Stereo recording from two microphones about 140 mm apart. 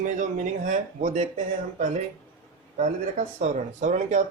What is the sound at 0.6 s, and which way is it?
Speech, 70° right (ahead or behind).